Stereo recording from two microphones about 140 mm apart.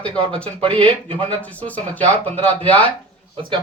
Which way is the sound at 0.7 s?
10° left (ahead or behind).